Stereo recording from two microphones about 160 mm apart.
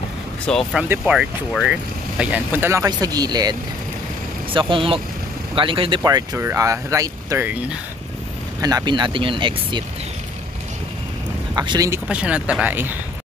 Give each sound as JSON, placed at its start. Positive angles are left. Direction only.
{"t": 0.5, "sound": "speech", "side_deg": 0}
{"t": 4.6, "sound": "speech", "side_deg": -30}
{"t": 8.5, "sound": "speech", "side_deg": -25}
{"t": 11.5, "sound": "speech", "side_deg": -25}
{"t": 11.9, "sound": "speech", "side_deg": -5}